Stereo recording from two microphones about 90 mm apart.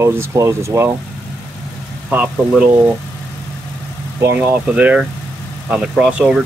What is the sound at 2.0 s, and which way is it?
Speech, 15° right (ahead or behind).